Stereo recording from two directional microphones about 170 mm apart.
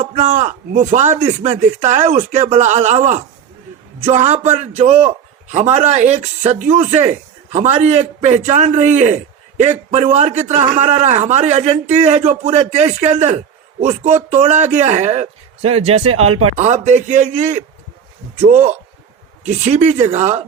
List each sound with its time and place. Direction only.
0.0 s a man's voice: 40° right (ahead or behind)